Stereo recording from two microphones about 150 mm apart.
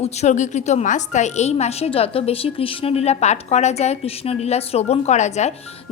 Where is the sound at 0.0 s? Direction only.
50° left (ahead or behind).